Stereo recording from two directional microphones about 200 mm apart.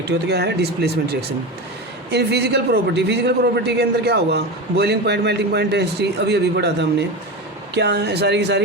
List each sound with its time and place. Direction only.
0.0 s a man's voice: 55° right (ahead or behind)